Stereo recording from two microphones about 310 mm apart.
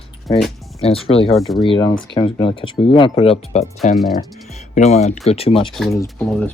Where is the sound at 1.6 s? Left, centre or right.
Centre.